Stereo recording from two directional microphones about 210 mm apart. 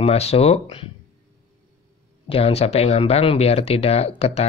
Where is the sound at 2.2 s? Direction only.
25° left (ahead or behind).